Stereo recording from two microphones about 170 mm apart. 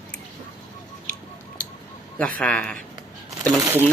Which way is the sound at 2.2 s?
5° left (ahead or behind).